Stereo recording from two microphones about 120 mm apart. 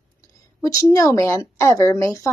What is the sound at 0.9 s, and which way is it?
A woman's voice, 25° left (ahead or behind).